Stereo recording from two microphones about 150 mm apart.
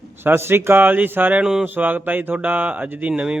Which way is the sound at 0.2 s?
15° right (ahead or behind).